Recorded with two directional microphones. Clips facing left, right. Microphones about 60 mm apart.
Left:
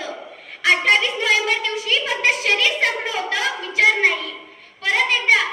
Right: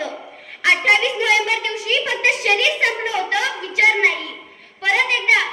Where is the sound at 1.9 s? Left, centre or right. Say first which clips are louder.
Right 1 dB; right.